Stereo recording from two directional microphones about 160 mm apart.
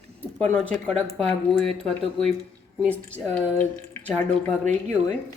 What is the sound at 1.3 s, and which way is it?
Speech, 5° left (ahead or behind).